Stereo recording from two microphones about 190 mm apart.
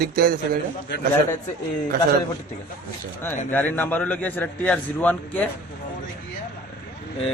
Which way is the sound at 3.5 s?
10° left (ahead or behind).